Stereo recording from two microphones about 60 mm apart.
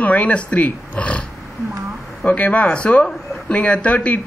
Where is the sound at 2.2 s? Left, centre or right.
Left.